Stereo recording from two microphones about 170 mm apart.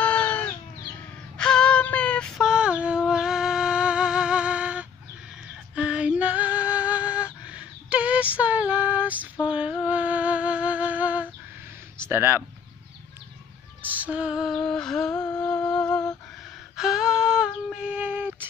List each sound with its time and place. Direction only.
0.0 s a sound: 10° left (ahead or behind)
1.3 s female singing: 5° left (ahead or behind)
5.8 s music: 5° right (ahead or behind)
7.4 s female singing: 5° right (ahead or behind)
9.5 s music: 5° right (ahead or behind)
12.0 s speech: 15° right (ahead or behind)
13.8 s lullaby: 10° right (ahead or behind)
14.5 s humming: 5° left (ahead or behind)
15.9 s lullaby: 20° left (ahead or behind)
16.7 s a sound: 5° right (ahead or behind)